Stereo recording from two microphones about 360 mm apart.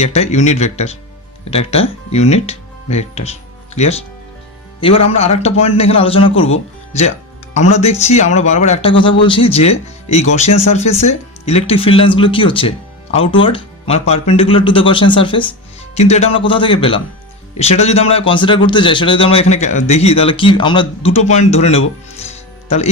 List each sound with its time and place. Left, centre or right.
0.0 s a man's voice: centre
6.9 s music: centre
7.8 s a man's voice: centre
22.3 s music: centre